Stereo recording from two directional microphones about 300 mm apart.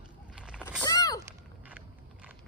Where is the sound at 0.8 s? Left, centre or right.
Centre.